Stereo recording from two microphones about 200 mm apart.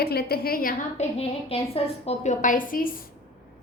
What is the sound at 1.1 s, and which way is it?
A woman's voice, 30° left (ahead or behind).